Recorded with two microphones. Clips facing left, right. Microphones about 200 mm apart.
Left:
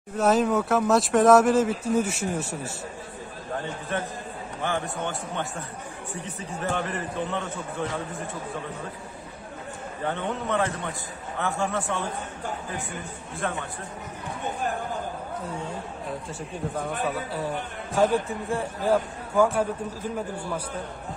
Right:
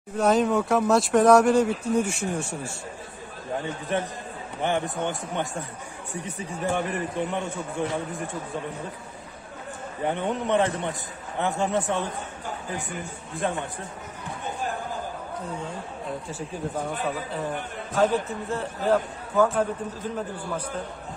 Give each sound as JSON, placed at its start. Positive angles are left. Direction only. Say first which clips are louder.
{"t": 0.2, "sound": "speech", "louder": "even", "side_deg": 0}
{"t": 3.9, "sound": "a man's voice", "louder": "right 3 dB", "side_deg": -15}
{"t": 10.0, "sound": "a man's voice", "louder": "right 3 dB", "side_deg": -15}
{"t": 13.4, "sound": "a man's voice", "louder": "right 3 dB", "side_deg": -20}
{"t": 17.9, "sound": "a man's voice", "louder": "left 1 dB", "side_deg": 10}